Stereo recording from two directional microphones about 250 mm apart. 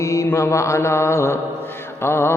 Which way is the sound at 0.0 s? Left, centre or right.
Centre.